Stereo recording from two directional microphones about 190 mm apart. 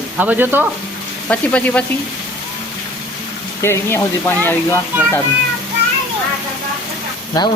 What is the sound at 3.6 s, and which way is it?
Speech, 15° left (ahead or behind).